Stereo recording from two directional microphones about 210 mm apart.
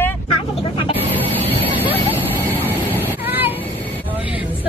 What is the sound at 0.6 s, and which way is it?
Vehicle, 25° left (ahead or behind).